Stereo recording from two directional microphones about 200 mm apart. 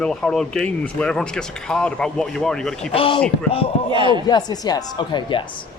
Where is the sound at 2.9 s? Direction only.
25° left (ahead or behind).